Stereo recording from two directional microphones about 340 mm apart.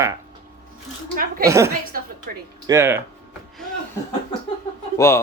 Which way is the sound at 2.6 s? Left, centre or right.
Centre.